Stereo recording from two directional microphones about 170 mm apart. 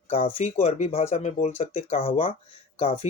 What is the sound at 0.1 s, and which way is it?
Speech, 30° left (ahead or behind).